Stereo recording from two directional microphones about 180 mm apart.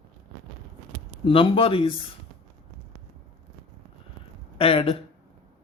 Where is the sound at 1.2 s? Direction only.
30° left (ahead or behind).